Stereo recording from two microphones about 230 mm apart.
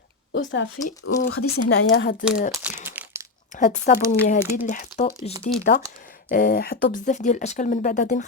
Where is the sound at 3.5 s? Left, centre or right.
Left.